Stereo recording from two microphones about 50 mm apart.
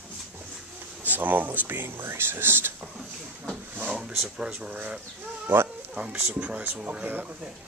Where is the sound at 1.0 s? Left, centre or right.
Right.